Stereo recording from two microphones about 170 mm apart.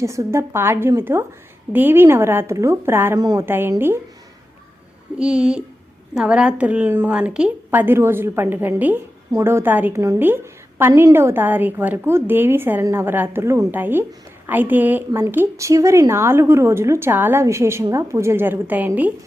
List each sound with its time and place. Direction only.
0.0 s a woman's voice: 15° right (ahead or behind)
5.1 s a child's voice: 5° right (ahead or behind)